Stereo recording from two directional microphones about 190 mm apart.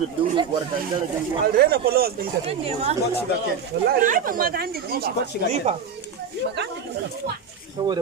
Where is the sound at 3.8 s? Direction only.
45° right (ahead or behind).